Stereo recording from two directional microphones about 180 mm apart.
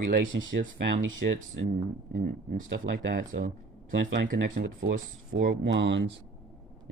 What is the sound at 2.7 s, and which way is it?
Speech, 80° right.